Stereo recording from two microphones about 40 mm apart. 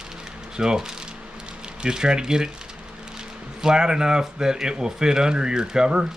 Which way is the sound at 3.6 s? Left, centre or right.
Centre.